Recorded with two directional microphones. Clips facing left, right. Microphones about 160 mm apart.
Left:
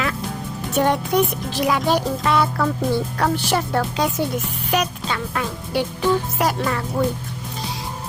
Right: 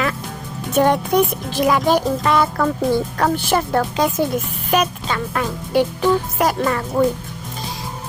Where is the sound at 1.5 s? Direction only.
50° right (ahead or behind).